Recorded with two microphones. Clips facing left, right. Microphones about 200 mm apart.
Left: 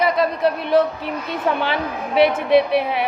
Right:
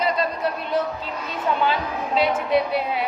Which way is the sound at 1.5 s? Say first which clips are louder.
Left 3 dB; 75° left (ahead or behind).